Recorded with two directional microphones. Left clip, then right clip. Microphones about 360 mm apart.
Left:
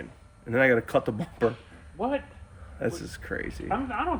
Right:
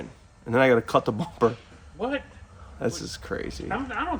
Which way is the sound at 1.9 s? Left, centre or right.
Centre.